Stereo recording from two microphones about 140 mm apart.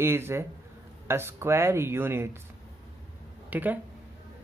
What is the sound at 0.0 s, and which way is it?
Speech, 15° right (ahead or behind).